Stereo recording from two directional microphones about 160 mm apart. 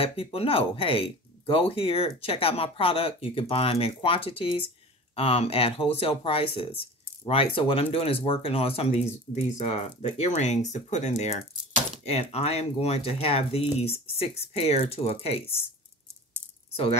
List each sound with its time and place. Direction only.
0.0 s speech: 35° left (ahead or behind)